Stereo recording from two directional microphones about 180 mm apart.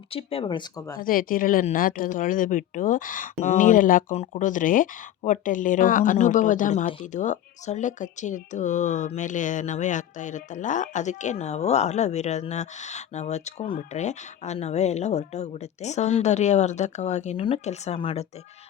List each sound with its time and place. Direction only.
0.1 s speech: 30° left (ahead or behind)
1.0 s speech: 50° left (ahead or behind); by 18.3 s 35° left (ahead or behind)